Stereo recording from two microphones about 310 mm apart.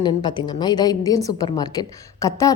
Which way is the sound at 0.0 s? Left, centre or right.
Centre.